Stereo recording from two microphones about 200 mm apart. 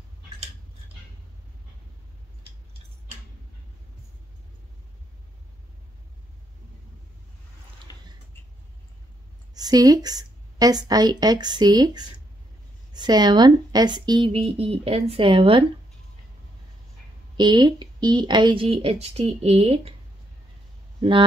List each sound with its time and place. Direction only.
7.9 s a sound: 20° left (ahead or behind)
9.5 s speech: 20° right (ahead or behind)
17.4 s speech: 20° right (ahead or behind)